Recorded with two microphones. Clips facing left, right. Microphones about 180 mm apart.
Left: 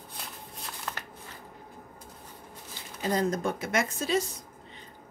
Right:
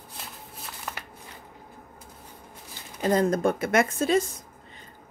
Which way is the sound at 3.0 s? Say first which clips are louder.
Right 5 dB; 50° right (ahead or behind).